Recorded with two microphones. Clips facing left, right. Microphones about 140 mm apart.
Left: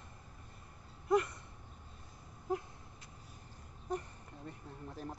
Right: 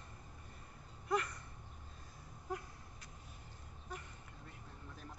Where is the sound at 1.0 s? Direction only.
20° left (ahead or behind).